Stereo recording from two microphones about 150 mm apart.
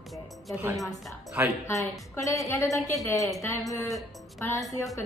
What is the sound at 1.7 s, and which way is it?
A woman's voice, 20° left (ahead or behind).